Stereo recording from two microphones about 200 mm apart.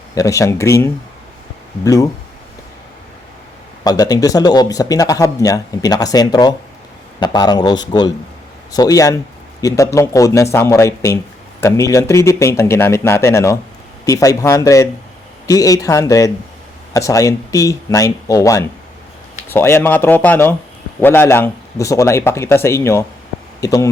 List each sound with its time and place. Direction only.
0.1 s a man's voice: 15° left (ahead or behind)
3.8 s a man's voice: 20° left (ahead or behind)